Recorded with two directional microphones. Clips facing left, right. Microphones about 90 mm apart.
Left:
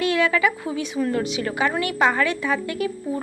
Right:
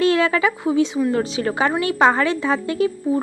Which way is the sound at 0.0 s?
30° right (ahead or behind).